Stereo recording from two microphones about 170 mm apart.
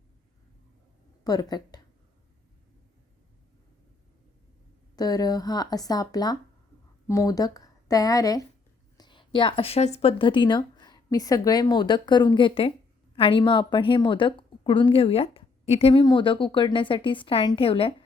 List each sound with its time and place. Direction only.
1.2 s a woman's voice: 20° left (ahead or behind)
4.9 s a woman's voice: 20° left (ahead or behind)